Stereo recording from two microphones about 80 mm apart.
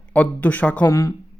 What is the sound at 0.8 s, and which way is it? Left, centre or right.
Speech, left.